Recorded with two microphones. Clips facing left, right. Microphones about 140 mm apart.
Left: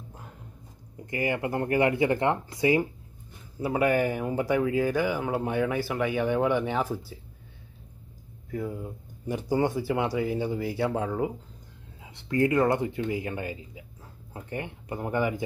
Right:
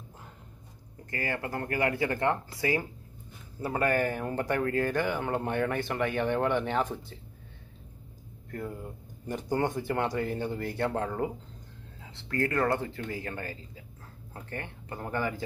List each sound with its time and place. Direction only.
1.1 s speech: 15° left (ahead or behind)
8.5 s speech: 5° left (ahead or behind)
12.0 s speech: 15° left (ahead or behind)